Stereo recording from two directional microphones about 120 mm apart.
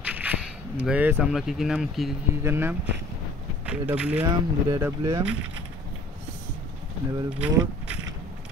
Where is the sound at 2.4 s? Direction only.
20° right (ahead or behind).